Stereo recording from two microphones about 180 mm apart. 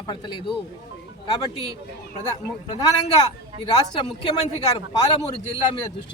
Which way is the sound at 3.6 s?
25° left (ahead or behind).